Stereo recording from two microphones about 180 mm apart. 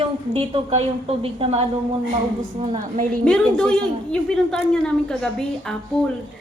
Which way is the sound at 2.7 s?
45° right (ahead or behind).